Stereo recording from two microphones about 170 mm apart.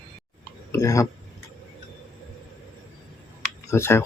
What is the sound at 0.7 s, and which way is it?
Speech, 20° left (ahead or behind).